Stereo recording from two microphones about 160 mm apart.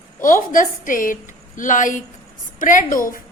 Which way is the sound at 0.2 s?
60° left (ahead or behind).